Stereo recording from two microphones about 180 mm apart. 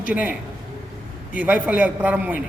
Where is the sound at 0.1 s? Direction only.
10° right (ahead or behind).